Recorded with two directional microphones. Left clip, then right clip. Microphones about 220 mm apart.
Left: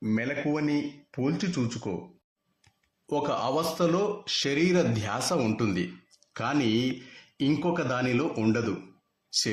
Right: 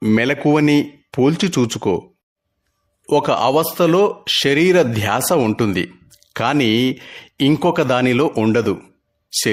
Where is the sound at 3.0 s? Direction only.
45° right (ahead or behind).